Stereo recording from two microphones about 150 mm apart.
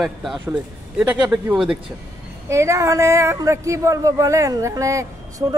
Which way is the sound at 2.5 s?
20° right (ahead or behind).